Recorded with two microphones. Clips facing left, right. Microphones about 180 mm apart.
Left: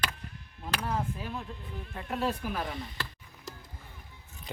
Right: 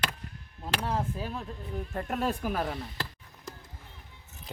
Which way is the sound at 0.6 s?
30° right (ahead or behind).